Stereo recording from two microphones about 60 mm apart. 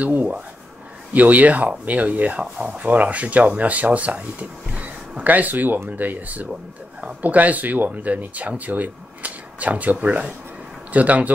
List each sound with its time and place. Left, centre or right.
0.0 s speech: right